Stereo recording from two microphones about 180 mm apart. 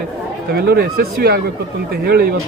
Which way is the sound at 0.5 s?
60° right (ahead or behind).